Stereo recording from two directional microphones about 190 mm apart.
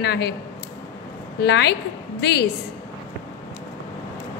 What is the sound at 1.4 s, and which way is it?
A woman's voice, 65° left (ahead or behind).